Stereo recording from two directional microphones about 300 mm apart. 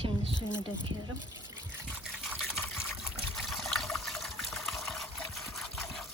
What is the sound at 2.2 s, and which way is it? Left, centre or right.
Water, centre.